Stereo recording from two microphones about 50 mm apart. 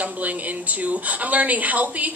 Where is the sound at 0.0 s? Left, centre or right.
Right.